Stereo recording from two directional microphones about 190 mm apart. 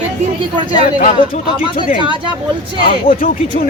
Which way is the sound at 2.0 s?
25° right (ahead or behind).